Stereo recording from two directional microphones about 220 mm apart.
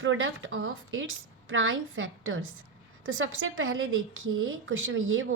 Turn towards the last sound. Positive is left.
turn(degrees=-65)  # may be behind; listen again after turning